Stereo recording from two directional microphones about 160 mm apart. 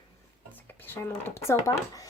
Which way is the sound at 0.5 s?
10° left (ahead or behind).